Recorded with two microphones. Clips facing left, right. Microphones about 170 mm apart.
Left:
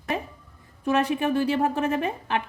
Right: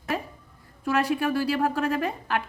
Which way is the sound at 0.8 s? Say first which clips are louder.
Left 1 dB; 20° left (ahead or behind).